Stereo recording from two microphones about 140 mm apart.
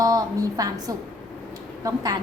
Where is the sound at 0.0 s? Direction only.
25° right (ahead or behind).